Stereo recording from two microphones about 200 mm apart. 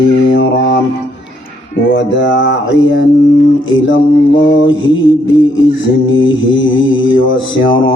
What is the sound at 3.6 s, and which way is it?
Mantra, 75° left (ahead or behind).